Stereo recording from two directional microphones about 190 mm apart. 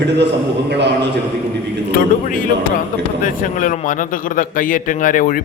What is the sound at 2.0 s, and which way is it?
A man's voice, 45° left (ahead or behind).